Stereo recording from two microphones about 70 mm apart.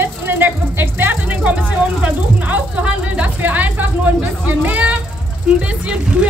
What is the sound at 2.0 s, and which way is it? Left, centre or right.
Speech, right.